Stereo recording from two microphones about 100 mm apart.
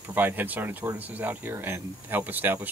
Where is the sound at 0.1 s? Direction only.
20° right (ahead or behind).